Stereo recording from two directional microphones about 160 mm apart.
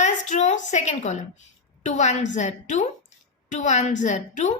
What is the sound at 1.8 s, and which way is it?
A woman's voice, 45° left (ahead or behind).